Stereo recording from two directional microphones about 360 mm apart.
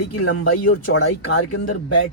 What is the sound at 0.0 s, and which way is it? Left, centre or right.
Speech, left.